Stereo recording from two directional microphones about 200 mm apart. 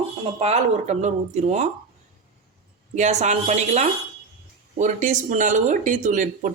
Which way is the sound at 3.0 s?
35° right (ahead or behind).